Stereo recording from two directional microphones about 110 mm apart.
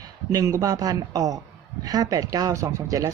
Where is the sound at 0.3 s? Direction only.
30° right (ahead or behind).